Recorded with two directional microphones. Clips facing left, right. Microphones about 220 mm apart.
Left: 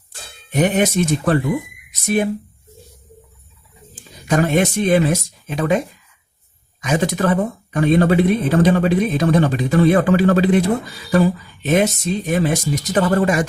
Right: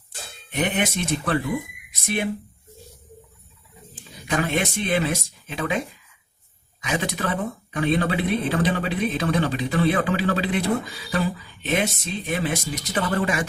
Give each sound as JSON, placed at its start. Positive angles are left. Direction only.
{"t": 0.5, "sound": "speech", "side_deg": 45}
{"t": 4.3, "sound": "speech", "side_deg": 45}
{"t": 6.8, "sound": "speech", "side_deg": 45}